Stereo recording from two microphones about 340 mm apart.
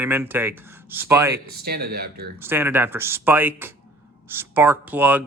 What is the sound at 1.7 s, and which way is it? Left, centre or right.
Speech, right.